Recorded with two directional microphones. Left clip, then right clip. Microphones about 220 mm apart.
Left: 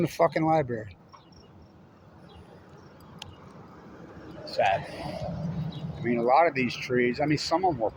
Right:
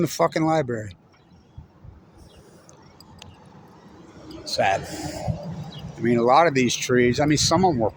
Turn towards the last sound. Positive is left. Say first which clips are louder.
# right 6 dB
turn(degrees=-50)  # may be behind; listen again after turning